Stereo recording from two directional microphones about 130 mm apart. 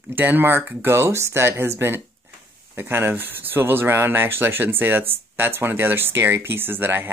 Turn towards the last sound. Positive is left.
turn(degrees=-15)  # may be behind; listen again after turning